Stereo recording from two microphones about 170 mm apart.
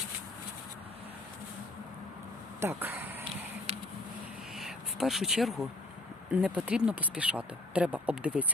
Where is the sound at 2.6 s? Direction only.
15° right (ahead or behind).